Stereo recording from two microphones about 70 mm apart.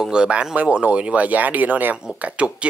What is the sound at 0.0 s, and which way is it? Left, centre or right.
Speech, centre.